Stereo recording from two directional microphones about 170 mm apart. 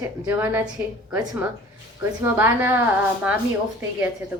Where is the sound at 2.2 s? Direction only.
15° right (ahead or behind).